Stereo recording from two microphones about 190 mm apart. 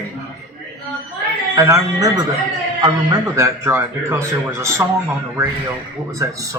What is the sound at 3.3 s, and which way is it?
A man's voice, 15° right (ahead or behind).